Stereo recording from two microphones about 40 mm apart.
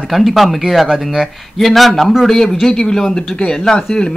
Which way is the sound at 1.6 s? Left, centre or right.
Centre.